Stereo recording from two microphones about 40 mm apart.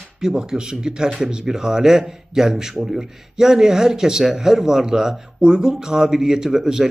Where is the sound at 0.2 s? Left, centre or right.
Centre.